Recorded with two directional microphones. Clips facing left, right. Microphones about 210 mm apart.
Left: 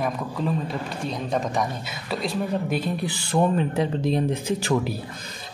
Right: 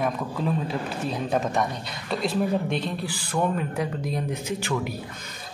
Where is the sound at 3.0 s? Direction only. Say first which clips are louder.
Left 4 dB; 25° left (ahead or behind).